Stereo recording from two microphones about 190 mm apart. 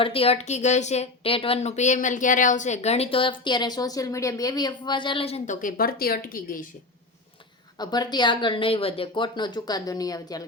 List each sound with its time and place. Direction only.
0.0 s speech: 30° left (ahead or behind); by 6.7 s 45° left (ahead or behind)
7.8 s speech: 20° left (ahead or behind)